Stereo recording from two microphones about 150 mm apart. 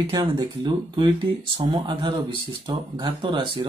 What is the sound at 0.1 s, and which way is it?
Speech, 30° right (ahead or behind).